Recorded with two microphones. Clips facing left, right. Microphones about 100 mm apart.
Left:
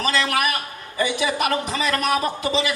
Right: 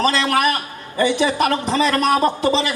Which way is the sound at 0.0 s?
35° right (ahead or behind).